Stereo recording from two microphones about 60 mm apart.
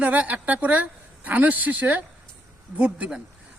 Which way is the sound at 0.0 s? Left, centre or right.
Right.